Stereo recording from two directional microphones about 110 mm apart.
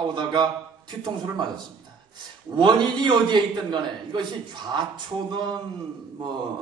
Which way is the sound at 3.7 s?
45° right (ahead or behind).